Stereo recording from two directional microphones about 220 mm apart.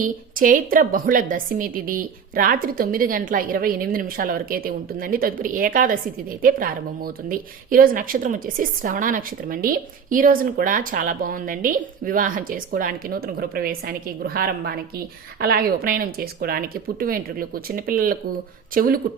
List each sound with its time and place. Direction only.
0.0 s speech: 40° right (ahead or behind)